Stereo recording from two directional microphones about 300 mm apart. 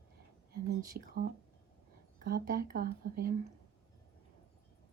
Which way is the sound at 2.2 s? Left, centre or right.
Right.